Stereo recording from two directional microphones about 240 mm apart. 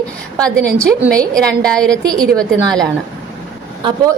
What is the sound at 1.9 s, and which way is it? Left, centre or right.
Speech, centre.